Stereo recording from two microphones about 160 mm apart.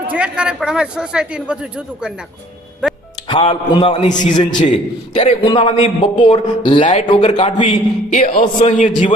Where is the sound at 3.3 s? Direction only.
40° left (ahead or behind).